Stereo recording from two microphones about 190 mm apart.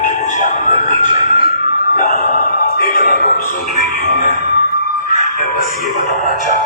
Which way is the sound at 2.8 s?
50° left (ahead or behind).